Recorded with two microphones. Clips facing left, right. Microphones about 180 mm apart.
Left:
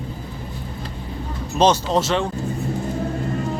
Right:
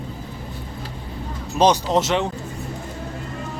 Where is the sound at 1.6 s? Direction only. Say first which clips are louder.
Even; 10° right (ahead or behind).